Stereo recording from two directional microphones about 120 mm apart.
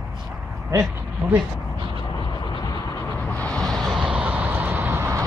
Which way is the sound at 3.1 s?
10° left (ahead or behind).